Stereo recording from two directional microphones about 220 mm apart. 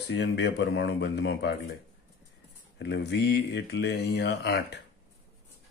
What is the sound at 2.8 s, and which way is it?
A man's voice, 50° left (ahead or behind).